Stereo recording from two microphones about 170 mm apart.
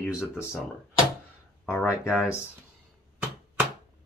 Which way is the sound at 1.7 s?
15° left (ahead or behind).